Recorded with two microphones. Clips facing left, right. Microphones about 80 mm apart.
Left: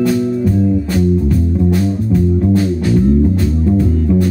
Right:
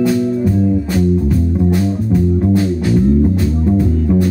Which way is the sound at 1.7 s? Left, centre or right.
Centre.